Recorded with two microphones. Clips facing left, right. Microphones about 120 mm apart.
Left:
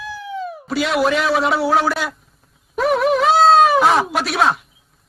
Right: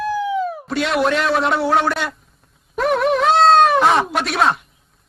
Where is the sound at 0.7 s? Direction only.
Centre (ahead or behind).